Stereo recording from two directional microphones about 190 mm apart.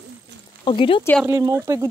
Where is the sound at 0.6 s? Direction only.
25° left (ahead or behind).